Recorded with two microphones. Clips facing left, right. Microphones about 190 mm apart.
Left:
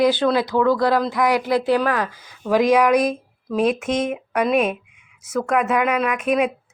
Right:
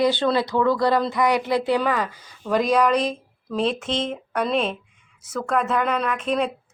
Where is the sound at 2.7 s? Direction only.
10° left (ahead or behind).